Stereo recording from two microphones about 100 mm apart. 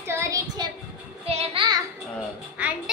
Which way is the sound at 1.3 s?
90° right.